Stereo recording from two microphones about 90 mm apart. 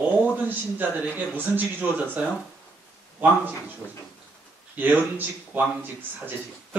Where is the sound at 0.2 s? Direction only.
20° right (ahead or behind).